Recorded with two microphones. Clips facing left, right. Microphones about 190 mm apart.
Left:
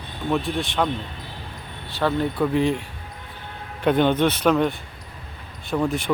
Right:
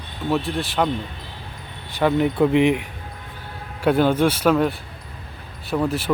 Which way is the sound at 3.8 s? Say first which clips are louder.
Right 1 dB; 5° right (ahead or behind).